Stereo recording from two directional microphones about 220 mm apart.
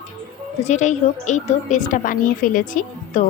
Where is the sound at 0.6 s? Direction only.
35° left (ahead or behind).